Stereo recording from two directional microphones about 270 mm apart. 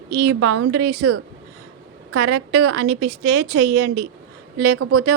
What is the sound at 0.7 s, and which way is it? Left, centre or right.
Speech, right.